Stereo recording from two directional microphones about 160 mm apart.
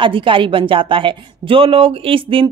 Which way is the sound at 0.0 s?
30° right (ahead or behind).